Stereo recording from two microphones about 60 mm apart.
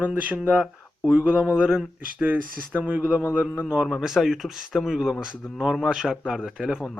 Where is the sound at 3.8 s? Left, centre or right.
Centre.